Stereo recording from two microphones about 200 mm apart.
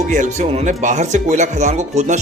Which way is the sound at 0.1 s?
35° right (ahead or behind).